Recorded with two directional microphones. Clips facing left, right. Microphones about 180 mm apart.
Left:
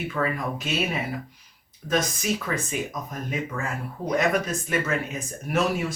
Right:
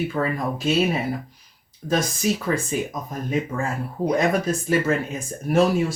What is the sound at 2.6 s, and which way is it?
Speech, 30° right (ahead or behind).